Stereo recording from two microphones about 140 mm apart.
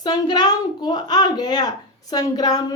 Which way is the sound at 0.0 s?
30° left (ahead or behind).